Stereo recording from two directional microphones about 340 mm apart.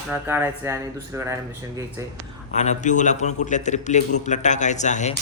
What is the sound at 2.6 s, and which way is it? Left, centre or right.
Speech, left.